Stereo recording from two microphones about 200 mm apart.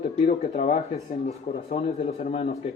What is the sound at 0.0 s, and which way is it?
Speech, 40° left (ahead or behind).